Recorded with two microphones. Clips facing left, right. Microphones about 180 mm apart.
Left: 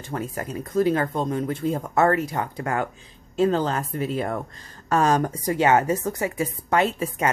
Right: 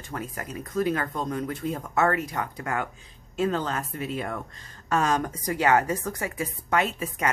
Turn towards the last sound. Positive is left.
turn(degrees=30)  # may be behind; listen again after turning